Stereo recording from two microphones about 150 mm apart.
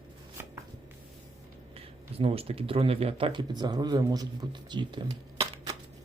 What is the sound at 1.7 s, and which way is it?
Speech, 40° right (ahead or behind).